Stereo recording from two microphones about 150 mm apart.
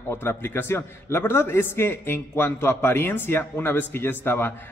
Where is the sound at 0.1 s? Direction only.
15° left (ahead or behind).